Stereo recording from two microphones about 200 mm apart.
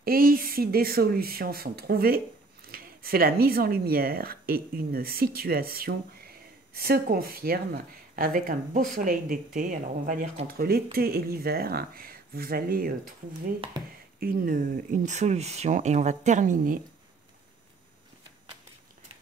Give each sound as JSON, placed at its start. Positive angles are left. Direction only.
{"t": 0.0, "sound": "speech", "side_deg": -45}
{"t": 14.2, "sound": "speech", "side_deg": -45}